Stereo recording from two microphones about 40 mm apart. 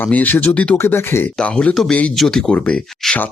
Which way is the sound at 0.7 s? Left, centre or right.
Left.